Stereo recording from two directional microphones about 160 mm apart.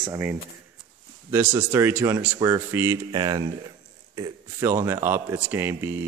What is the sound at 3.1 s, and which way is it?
A man's voice, 25° right (ahead or behind).